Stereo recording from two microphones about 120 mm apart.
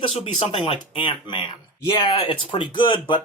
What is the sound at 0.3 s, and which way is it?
Speech, 50° left (ahead or behind).